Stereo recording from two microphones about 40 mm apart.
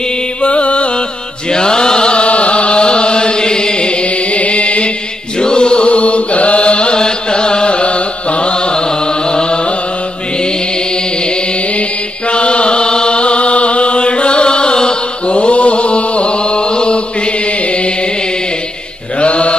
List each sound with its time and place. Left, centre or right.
0.4 s music: left
1.5 s chant: centre
12.3 s chant: left
19.1 s mantra: left